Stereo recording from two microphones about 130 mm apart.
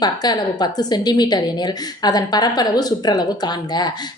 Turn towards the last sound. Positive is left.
turn(degrees=35)  # may be behind; listen again after turning